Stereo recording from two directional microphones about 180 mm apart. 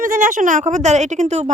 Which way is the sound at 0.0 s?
45° right (ahead or behind).